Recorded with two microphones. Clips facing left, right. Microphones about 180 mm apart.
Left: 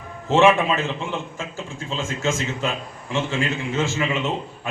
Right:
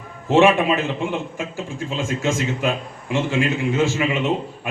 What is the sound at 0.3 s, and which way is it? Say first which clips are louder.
A man's voice: right 2 dB; 15° right (ahead or behind).